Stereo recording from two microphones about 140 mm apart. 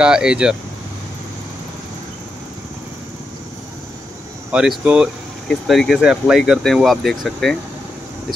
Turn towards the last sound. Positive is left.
turn(degrees=0)  # may be behind; listen again after turning